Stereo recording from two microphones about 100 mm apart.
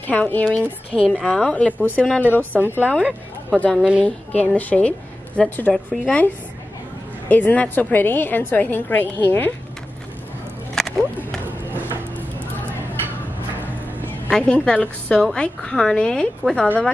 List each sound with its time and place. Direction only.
0.0 s a woman's voice: 15° left (ahead or behind)
3.0 s a woman's voice: 15° right (ahead or behind)
4.6 s a woman's voice: 15° left (ahead or behind)
10.8 s a sound: 5° left (ahead or behind)
11.4 s a sound: 20° right (ahead or behind)
14.3 s a woman's voice: 10° left (ahead or behind)